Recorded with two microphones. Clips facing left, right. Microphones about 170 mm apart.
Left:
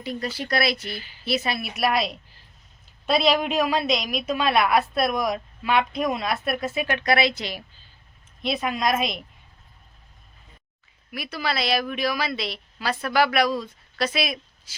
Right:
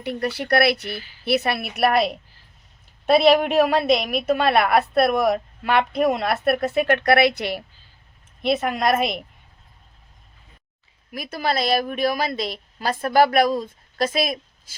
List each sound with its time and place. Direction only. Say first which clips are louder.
0.0 s a woman's voice: right 4 dB; 65° right (ahead or behind)
0.9 s a woman's voice: right 3 dB; 20° left (ahead or behind)
1.2 s a woman's voice: right 4 dB; 60° right (ahead or behind)
11.1 s a woman's voice: right 4 dB; 45° right (ahead or behind)